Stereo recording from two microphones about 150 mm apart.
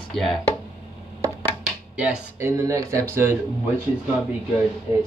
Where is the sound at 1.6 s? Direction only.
5° right (ahead or behind).